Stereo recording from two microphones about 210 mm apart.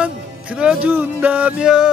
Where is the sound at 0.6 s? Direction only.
5° right (ahead or behind).